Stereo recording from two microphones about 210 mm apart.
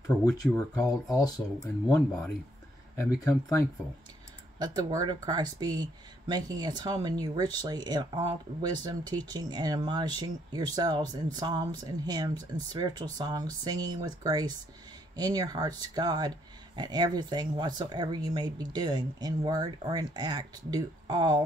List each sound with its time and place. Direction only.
0.2 s speech: 15° left (ahead or behind)
3.3 s speech: 15° left (ahead or behind)
4.6 s speech: 20° right (ahead or behind)